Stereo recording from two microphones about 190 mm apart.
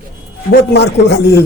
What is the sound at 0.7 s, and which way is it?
Speech, 60° left (ahead or behind).